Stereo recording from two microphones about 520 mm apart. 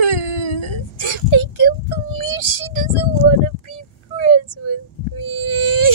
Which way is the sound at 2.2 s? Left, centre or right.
Left.